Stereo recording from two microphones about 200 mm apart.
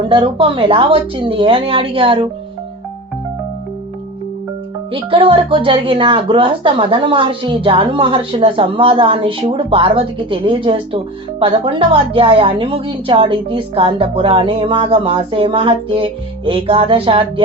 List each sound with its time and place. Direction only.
0.0 s speech: 25° right (ahead or behind)
4.9 s speech: 25° right (ahead or behind)